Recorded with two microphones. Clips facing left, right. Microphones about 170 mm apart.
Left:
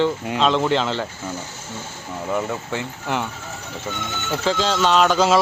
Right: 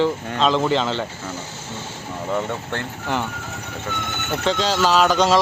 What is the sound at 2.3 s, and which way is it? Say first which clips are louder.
Speech: even; 5° left (ahead or behind).